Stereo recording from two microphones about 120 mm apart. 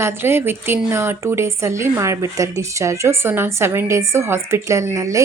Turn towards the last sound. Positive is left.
turn(degrees=-25)  # may be behind; listen again after turning